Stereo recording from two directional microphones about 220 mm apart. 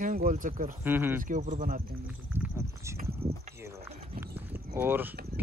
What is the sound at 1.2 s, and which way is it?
Speech, 35° right (ahead or behind).